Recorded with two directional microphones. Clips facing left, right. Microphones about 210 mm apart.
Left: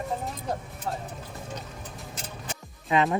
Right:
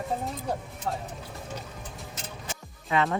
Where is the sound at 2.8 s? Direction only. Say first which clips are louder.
Left 2 dB; 20° left (ahead or behind).